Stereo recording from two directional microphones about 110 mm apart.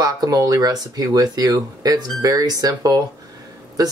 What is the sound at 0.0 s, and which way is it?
Speech, 35° right (ahead or behind).